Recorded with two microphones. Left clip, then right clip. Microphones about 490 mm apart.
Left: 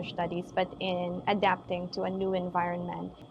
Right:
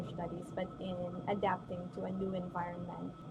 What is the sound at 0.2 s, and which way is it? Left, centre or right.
A woman's voice, left.